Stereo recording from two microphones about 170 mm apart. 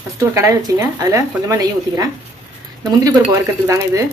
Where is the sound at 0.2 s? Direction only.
15° right (ahead or behind).